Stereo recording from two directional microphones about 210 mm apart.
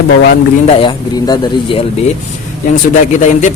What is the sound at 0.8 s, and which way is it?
Speech, 20° left (ahead or behind).